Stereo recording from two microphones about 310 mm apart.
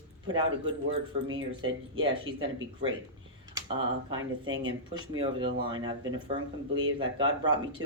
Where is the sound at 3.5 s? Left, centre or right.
Centre.